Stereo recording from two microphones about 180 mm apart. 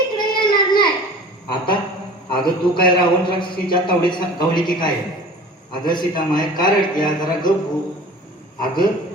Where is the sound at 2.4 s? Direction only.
25° left (ahead or behind).